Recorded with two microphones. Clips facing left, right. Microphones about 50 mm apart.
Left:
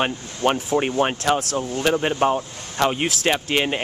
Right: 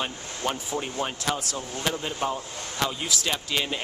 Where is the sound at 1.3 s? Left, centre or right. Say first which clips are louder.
Left 8 dB; left.